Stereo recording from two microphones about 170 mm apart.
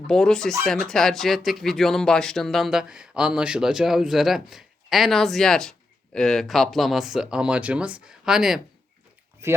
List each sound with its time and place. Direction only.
0.1 s speech: 5° left (ahead or behind)
9.4 s speech: 15° right (ahead or behind)